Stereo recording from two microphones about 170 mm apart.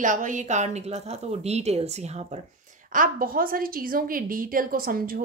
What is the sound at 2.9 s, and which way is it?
A woman's voice, 55° right (ahead or behind).